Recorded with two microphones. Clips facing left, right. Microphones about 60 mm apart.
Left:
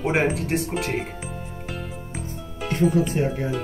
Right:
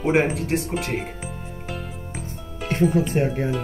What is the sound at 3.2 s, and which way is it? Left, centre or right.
Speech, right.